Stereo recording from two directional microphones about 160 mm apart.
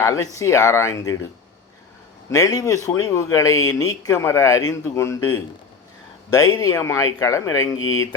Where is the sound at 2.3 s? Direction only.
20° left (ahead or behind).